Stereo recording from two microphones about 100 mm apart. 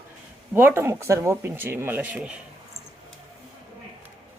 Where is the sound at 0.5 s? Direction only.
25° right (ahead or behind).